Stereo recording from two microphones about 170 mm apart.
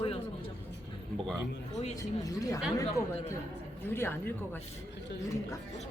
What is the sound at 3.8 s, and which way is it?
Speech, 15° left (ahead or behind).